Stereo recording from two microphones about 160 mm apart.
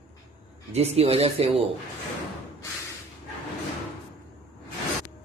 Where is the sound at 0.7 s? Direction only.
40° right (ahead or behind).